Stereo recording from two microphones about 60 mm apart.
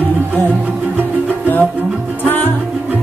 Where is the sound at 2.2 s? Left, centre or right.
Left.